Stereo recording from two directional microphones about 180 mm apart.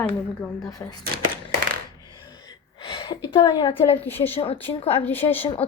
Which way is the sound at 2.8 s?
25° left (ahead or behind).